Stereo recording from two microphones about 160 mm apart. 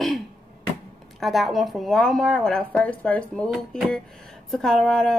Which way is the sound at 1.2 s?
Centre (ahead or behind).